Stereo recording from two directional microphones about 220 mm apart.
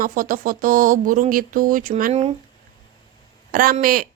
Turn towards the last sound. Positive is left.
turn(degrees=-40)  # may be behind; listen again after turning